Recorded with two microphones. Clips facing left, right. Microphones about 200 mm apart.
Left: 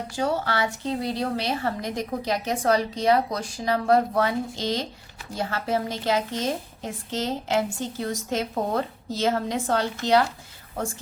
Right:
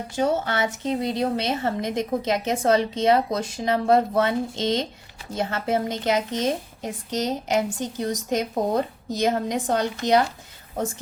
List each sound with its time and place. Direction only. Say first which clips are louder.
0.1 s a woman's voice: right 3 dB; 20° right (ahead or behind)